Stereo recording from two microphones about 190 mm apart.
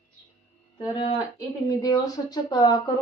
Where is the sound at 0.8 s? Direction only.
25° left (ahead or behind).